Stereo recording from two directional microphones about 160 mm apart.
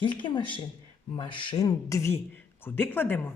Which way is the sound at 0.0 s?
30° left (ahead or behind).